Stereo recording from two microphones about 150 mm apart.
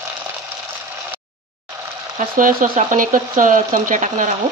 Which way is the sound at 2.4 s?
60° right (ahead or behind).